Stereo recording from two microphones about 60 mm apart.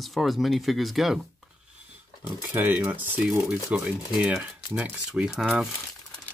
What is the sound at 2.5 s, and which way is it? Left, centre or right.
Speech, right.